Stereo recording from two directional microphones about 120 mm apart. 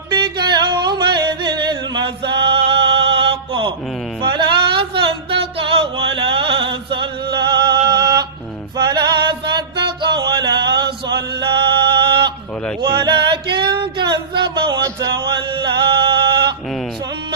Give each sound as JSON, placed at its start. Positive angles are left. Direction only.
{"t": 0.1, "sound": "singing", "side_deg": -35}
{"t": 4.2, "sound": "music", "side_deg": -40}
{"t": 12.8, "sound": "a sound", "side_deg": -40}
{"t": 14.8, "sound": "male singing", "side_deg": -35}